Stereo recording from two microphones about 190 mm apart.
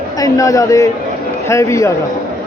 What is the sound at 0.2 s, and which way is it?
Speech, 15° left (ahead or behind).